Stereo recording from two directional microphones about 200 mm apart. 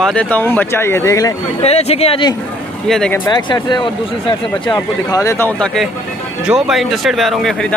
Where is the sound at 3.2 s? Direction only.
20° left (ahead or behind).